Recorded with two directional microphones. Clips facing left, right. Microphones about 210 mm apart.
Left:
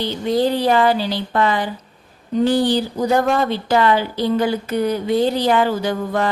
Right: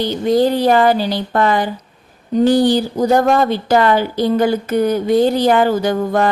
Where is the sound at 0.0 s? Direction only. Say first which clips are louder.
Right 4 dB; 45° right (ahead or behind).